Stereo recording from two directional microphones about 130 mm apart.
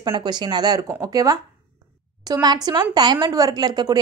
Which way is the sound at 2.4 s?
30° right (ahead or behind).